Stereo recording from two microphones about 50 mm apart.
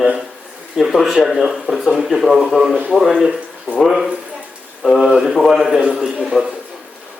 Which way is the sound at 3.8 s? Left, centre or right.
Centre.